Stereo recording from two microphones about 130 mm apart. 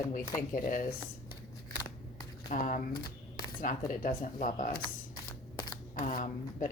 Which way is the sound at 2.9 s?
30° left (ahead or behind).